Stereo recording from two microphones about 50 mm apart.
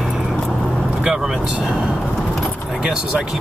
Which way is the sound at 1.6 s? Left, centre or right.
Centre.